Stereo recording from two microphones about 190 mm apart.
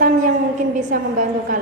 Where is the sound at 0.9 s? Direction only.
45° right (ahead or behind).